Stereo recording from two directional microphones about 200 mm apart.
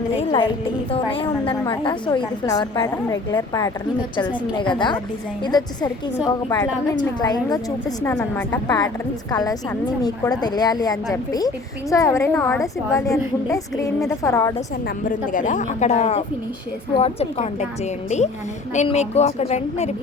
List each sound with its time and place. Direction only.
0.2 s a woman's voice: 25° left (ahead or behind)
15.0 s a woman's voice: 40° left (ahead or behind)
18.7 s a woman's voice: 35° left (ahead or behind)